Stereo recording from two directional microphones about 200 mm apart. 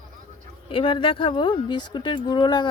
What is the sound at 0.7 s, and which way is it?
Speech, 25° left (ahead or behind).